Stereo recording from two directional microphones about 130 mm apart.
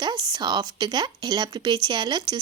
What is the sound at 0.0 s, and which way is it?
A woman's voice, 30° right (ahead or behind).